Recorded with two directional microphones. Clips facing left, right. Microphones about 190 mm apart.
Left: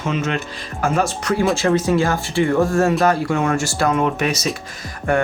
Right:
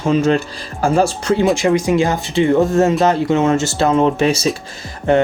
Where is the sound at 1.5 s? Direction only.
15° right (ahead or behind).